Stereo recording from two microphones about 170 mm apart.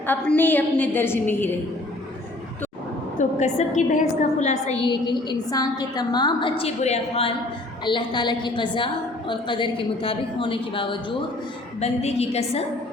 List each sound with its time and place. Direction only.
0.1 s a woman's voice: 10° left (ahead or behind)
3.2 s a woman's voice: 45° left (ahead or behind)
4.9 s a woman's voice: 25° left (ahead or behind)
6.6 s a woman's voice: 40° left (ahead or behind)